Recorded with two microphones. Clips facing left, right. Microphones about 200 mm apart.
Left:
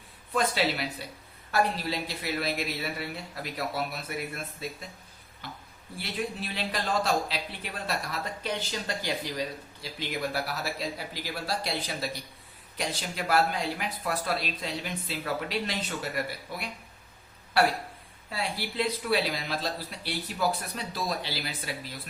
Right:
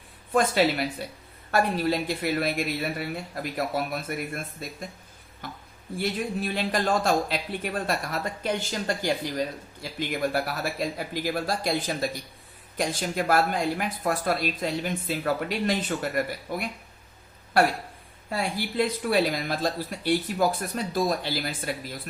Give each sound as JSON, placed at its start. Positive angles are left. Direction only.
{"t": 0.3, "sound": "speech", "side_deg": -50}
{"t": 6.0, "sound": "speech", "side_deg": -50}